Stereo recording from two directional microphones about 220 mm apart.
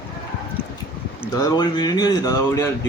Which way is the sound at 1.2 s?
15° left (ahead or behind).